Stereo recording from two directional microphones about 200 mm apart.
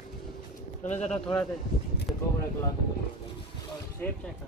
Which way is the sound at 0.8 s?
35° left (ahead or behind).